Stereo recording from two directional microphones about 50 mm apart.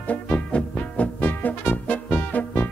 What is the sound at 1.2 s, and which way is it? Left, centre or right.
Music, left.